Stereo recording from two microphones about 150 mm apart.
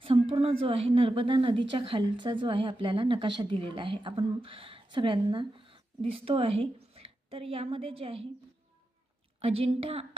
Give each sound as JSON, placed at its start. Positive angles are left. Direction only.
{"t": 0.0, "sound": "a woman's voice", "side_deg": -40}
{"t": 9.4, "sound": "a woman's voice", "side_deg": -40}